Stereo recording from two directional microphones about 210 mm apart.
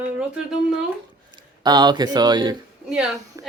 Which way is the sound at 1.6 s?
20° right (ahead or behind).